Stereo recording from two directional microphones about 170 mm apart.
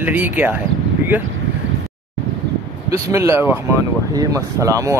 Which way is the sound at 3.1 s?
15° right (ahead or behind).